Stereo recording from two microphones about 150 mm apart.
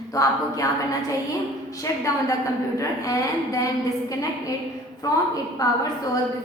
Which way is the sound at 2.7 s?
20° left (ahead or behind).